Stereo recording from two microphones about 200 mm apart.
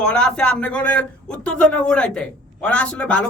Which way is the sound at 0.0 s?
5° left (ahead or behind).